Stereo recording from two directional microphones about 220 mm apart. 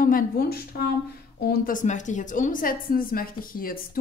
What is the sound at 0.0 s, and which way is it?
A woman's voice, 40° left (ahead or behind).